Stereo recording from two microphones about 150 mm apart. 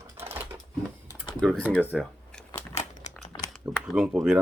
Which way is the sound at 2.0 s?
5° left (ahead or behind).